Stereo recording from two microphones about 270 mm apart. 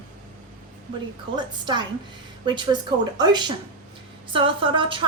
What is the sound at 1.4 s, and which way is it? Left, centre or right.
A woman's voice, centre.